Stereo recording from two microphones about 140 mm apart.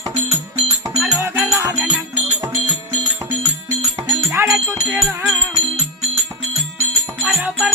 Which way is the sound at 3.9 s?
15° right (ahead or behind).